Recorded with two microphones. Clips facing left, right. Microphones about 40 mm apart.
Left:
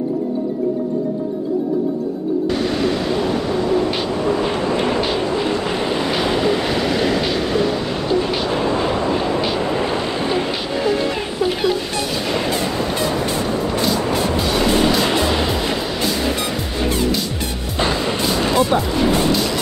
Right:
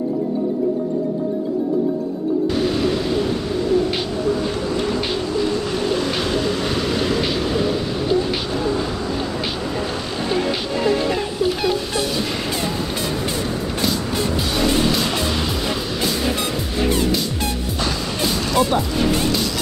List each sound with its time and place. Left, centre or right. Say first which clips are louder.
4.4 s vehicle: left 3 dB; left
5.0 s waves: left 2 dB; left; by 7.7 s centre
8.5 s vehicle: left 3 dB; left
14.3 s music: left 1 dB; centre
17.7 s music: left 8 dB; left